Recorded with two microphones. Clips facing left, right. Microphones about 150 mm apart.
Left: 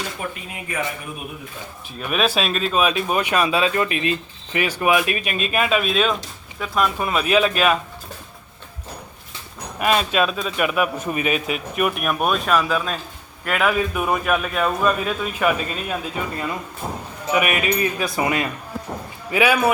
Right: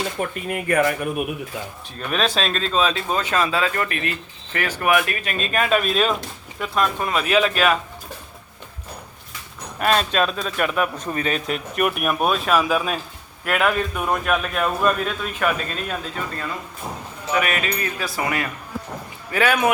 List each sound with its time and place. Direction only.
0.4 s speech: 60° right (ahead or behind)
2.0 s a man's voice: 10° left (ahead or behind)
9.7 s a man's voice: 10° left (ahead or behind)
19.3 s speech: 10° left (ahead or behind)